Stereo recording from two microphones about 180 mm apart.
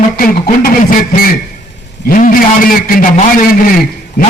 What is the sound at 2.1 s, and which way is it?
A man's voice, 50° left (ahead or behind).